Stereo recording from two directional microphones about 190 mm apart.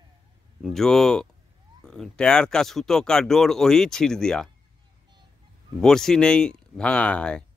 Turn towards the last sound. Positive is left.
turn(degrees=5)  # may be behind; listen again after turning